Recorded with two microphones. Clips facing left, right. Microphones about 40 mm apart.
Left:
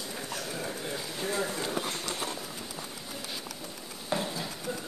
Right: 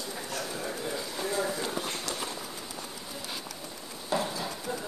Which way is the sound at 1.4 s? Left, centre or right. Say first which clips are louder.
Right 1 dB; centre.